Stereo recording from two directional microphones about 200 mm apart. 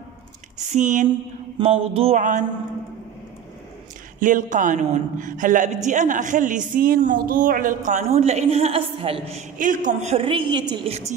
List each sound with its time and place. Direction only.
0.7 s a man's voice: 40° right (ahead or behind)
1.6 s a sound: 30° right (ahead or behind)
4.2 s a man's voice: 40° right (ahead or behind)